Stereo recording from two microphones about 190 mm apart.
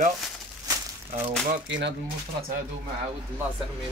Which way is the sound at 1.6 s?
70° right (ahead or behind).